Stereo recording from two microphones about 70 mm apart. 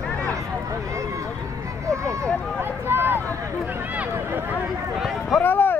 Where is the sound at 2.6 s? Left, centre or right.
Right.